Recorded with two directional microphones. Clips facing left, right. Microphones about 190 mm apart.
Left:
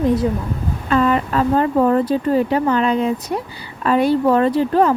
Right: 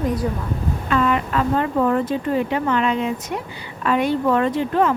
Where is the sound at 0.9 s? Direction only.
35° left (ahead or behind).